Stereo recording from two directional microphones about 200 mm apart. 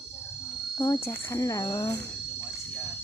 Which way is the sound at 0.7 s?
20° left (ahead or behind).